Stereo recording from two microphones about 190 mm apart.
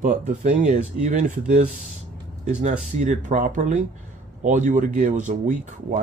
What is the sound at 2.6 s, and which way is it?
Speech, 40° right (ahead or behind).